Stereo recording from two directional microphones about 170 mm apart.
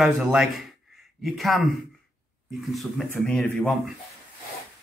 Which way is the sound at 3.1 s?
10° left (ahead or behind).